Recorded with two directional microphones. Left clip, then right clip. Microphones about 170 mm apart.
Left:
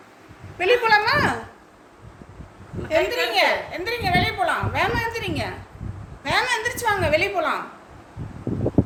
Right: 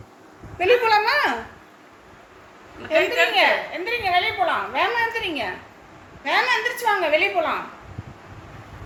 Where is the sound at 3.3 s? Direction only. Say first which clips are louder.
Right 1 dB; 5° left (ahead or behind).